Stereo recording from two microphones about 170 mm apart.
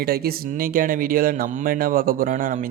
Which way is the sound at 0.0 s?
65° right (ahead or behind).